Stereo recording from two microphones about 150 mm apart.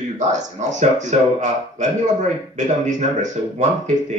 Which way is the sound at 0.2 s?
55° right (ahead or behind).